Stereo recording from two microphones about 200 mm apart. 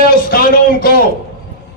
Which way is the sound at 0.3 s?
50° left (ahead or behind).